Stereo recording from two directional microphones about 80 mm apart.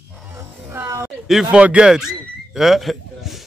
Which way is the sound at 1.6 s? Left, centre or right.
Centre.